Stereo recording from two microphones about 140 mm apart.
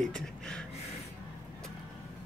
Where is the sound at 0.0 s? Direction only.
5° left (ahead or behind).